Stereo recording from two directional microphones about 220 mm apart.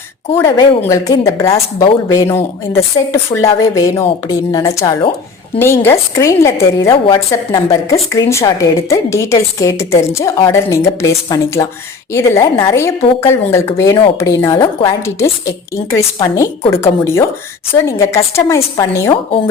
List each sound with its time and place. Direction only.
0.4 s a woman's voice: 20° left (ahead or behind)